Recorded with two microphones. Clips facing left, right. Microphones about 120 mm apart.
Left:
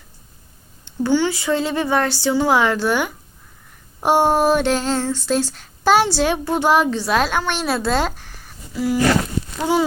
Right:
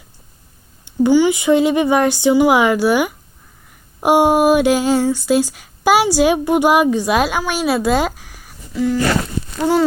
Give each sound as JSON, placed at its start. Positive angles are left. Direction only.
{"t": 0.9, "sound": "speech", "side_deg": -15}
{"t": 8.7, "sound": "speech", "side_deg": 5}